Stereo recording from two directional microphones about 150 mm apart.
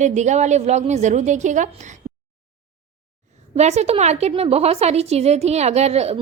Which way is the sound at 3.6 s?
45° right (ahead or behind).